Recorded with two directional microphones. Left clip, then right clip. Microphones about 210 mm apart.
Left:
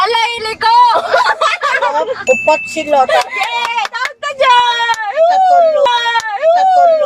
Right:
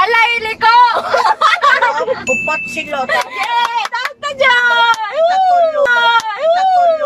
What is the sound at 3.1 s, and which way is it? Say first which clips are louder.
Speech: left 2 dB; 10° left (ahead or behind).